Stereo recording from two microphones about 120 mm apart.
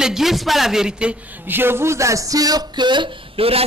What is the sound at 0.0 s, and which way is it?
A man's voice, 5° right (ahead or behind).